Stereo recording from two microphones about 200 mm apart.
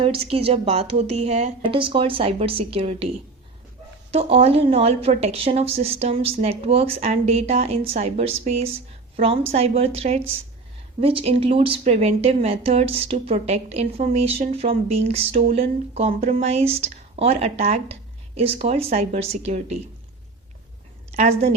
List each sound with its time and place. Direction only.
0.0 s speech: 30° right (ahead or behind)
4.1 s a woman's voice: 30° right (ahead or behind)
21.1 s a woman's voice: 30° right (ahead or behind)